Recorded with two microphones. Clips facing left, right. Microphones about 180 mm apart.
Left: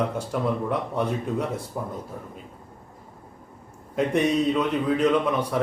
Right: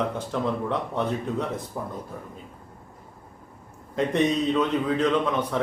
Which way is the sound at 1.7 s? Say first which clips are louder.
Left 1 dB; 15° left (ahead or behind).